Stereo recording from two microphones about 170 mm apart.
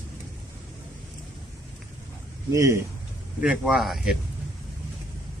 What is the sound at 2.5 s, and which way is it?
Speech, 20° right (ahead or behind).